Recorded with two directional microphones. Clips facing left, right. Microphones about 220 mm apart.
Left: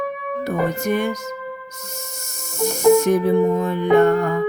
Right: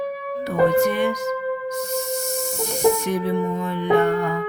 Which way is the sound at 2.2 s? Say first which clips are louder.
Right 1 dB; 45° left (ahead or behind).